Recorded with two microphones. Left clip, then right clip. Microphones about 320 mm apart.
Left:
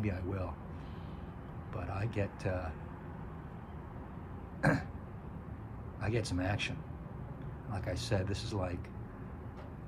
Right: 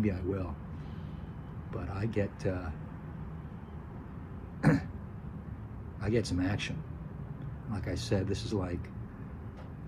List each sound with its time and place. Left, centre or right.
0.0 s a man's voice: centre
1.7 s speech: centre
4.6 s throat clearing: centre
6.0 s speech: centre
7.7 s speech: centre